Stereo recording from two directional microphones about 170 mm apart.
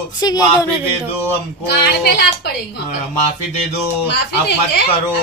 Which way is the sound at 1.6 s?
70° left (ahead or behind).